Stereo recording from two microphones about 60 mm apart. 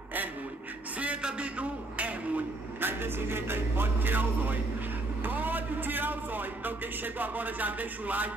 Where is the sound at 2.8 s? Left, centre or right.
Right.